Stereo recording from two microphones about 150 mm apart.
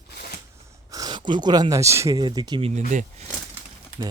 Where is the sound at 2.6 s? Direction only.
45° right (ahead or behind).